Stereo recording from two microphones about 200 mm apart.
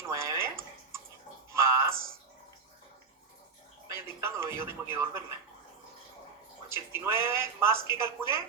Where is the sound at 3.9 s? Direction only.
15° right (ahead or behind).